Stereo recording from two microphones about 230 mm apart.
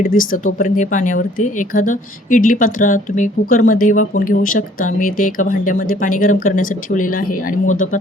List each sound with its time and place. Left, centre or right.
0.0 s speech: left